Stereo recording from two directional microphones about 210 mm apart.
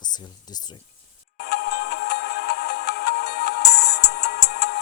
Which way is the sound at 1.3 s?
50° left (ahead or behind).